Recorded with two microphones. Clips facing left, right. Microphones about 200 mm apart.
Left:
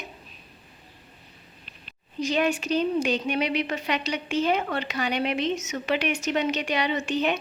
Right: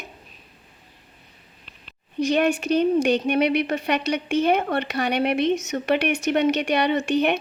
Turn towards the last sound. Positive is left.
turn(degrees=-60)  # may be behind; listen again after turning